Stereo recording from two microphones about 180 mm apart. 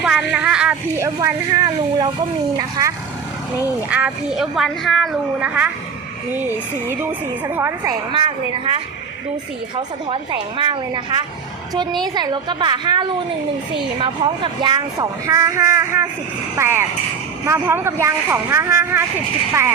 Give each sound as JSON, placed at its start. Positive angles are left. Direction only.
{"t": 0.0, "sound": "a woman's voice", "side_deg": 0}
{"t": 3.8, "sound": "a woman's voice", "side_deg": -5}
{"t": 7.0, "sound": "speech", "side_deg": -10}
{"t": 8.1, "sound": "a woman's voice", "side_deg": -30}
{"t": 10.6, "sound": "a woman's voice", "side_deg": -25}